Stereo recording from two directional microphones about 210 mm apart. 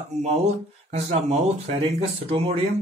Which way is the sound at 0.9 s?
30° right (ahead or behind).